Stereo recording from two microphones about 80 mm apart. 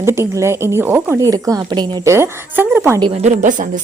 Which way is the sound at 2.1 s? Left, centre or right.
Right.